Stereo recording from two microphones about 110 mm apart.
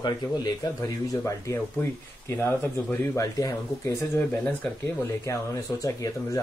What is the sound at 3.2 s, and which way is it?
Speech, 35° left (ahead or behind).